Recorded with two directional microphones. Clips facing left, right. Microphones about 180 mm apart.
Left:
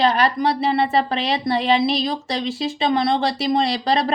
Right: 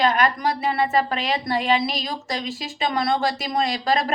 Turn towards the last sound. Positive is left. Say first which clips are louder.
# left 3 dB
turn(degrees=30)  # may be behind; listen again after turning